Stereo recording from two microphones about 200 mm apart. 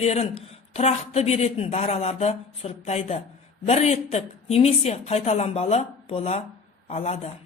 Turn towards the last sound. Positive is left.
turn(degrees=30)  # may be behind; listen again after turning